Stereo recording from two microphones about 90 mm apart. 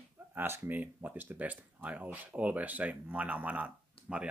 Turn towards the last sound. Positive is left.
turn(degrees=-15)  # may be behind; listen again after turning